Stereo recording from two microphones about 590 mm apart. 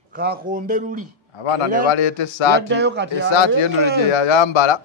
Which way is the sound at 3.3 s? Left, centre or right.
Left.